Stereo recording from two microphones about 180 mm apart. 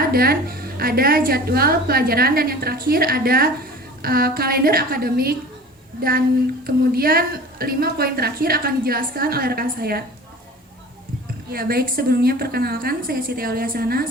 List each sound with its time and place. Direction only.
0.0 s a woman's voice: 55° right (ahead or behind)
11.5 s a woman's voice: 55° right (ahead or behind)